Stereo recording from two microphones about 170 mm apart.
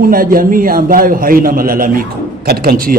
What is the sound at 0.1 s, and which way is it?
A man's voice, 60° right (ahead or behind).